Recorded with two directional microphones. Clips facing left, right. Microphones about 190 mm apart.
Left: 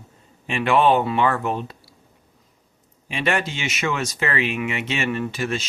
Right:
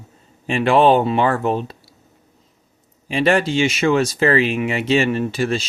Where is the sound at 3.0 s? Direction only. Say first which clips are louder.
Right 7 dB; 35° right (ahead or behind).